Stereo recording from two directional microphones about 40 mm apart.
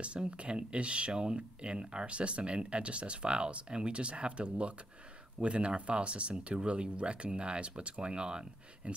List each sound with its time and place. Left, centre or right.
0.0 s speech: right